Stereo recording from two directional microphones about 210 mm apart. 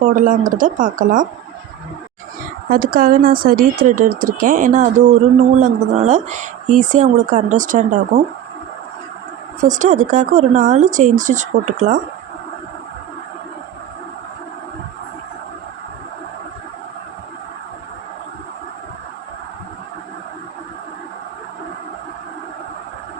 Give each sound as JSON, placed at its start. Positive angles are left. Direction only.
{"t": 0.0, "sound": "speech", "side_deg": -40}
{"t": 2.6, "sound": "speech", "side_deg": -45}
{"t": 9.6, "sound": "speech", "side_deg": -35}